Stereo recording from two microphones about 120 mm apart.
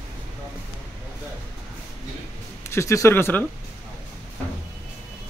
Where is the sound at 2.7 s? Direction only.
25° left (ahead or behind).